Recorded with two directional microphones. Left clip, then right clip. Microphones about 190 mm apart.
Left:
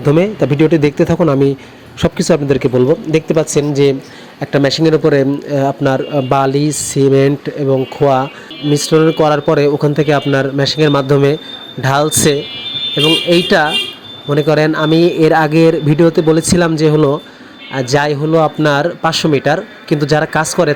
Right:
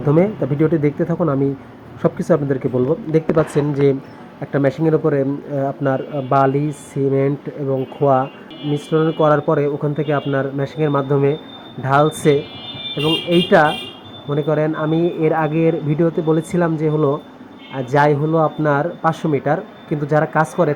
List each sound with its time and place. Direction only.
0.0 s speech: 45° left (ahead or behind)
6.2 s speech: 55° left (ahead or behind)
16.0 s speech: 50° left (ahead or behind)